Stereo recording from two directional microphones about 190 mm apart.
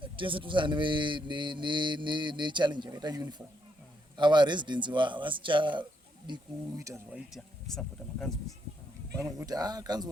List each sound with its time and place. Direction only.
0.0 s speech: 25° right (ahead or behind); by 8.3 s 5° left (ahead or behind)
9.2 s speech: 20° right (ahead or behind)